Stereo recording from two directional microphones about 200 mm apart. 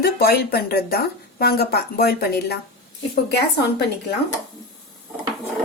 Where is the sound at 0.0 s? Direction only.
50° left (ahead or behind).